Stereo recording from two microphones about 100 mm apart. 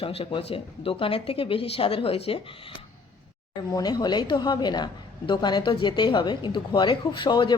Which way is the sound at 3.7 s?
45° left (ahead or behind).